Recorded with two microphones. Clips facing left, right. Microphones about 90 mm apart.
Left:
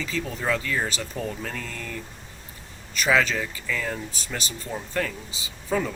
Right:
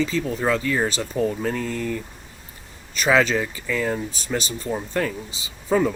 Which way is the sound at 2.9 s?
30° right (ahead or behind).